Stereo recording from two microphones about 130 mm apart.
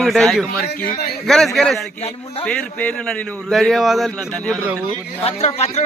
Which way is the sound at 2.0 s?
55° left (ahead or behind).